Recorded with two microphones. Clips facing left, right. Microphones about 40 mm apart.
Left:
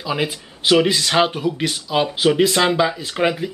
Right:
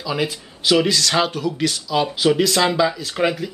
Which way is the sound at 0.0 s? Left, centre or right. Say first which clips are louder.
Left 1 dB; centre.